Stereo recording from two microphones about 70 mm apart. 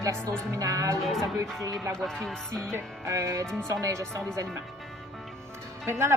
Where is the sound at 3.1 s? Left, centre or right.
Right.